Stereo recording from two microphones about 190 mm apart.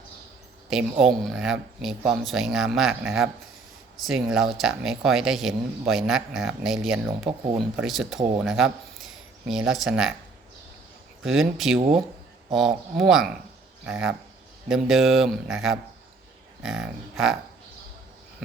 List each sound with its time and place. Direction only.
0.7 s speech: 5° right (ahead or behind)
7.3 s speech: 25° right (ahead or behind)
7.6 s speech: centre (ahead or behind)
11.2 s speech: centre (ahead or behind)